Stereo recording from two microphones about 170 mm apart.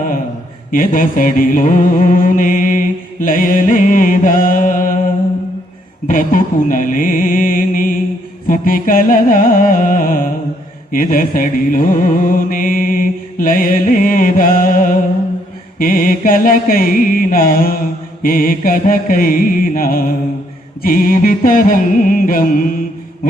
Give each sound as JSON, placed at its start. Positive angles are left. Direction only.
{"t": 0.7, "sound": "music", "side_deg": 55}
{"t": 6.1, "sound": "music", "side_deg": 50}